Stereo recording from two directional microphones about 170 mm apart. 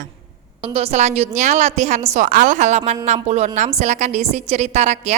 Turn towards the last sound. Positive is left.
turn(degrees=-40)  # may be behind; listen again after turning